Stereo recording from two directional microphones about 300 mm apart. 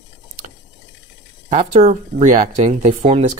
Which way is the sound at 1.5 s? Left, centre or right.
Right.